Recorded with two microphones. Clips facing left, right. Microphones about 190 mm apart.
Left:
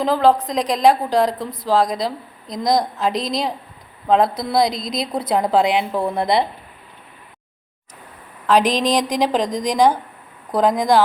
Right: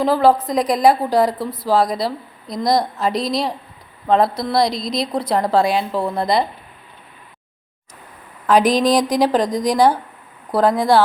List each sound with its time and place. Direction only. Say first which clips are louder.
0.0 s a woman's voice: right 1 dB; 5° right (ahead or behind)
5.6 s speech: even; 20° left (ahead or behind)
8.4 s a woman's voice: right 2 dB; 10° right (ahead or behind)
10.8 s speech: right 1 dB; 15° left (ahead or behind)